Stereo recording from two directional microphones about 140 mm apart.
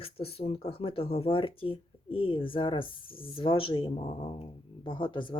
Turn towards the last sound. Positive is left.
turn(degrees=35)  # may be behind; listen again after turning